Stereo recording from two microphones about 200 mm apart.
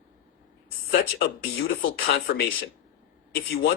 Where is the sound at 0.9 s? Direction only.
50° left (ahead or behind).